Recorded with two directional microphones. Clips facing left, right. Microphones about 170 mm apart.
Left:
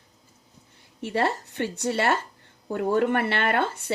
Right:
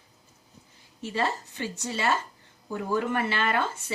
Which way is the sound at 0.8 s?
65° left (ahead or behind).